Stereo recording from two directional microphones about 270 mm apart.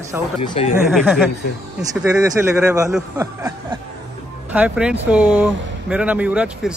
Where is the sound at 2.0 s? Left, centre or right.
Centre.